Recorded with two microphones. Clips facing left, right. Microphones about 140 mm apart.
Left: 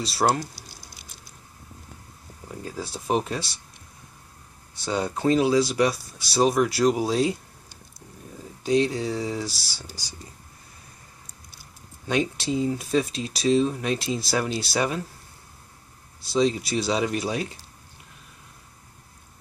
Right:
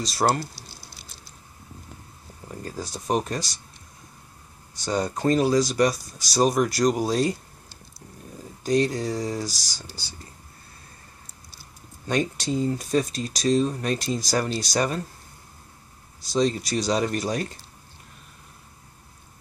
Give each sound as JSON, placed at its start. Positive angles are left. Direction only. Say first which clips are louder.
{"t": 0.0, "sound": "speech", "louder": "even", "side_deg": 5}
{"t": 2.4, "sound": "speech", "louder": "even", "side_deg": 0}
{"t": 4.8, "sound": "speech", "louder": "even", "side_deg": 5}
{"t": 8.6, "sound": "speech", "louder": "even", "side_deg": 5}
{"t": 12.1, "sound": "speech", "louder": "even", "side_deg": 5}
{"t": 16.3, "sound": "speech", "louder": "left 1 dB", "side_deg": 5}